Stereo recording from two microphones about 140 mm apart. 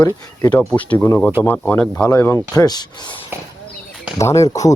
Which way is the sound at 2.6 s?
30° left (ahead or behind).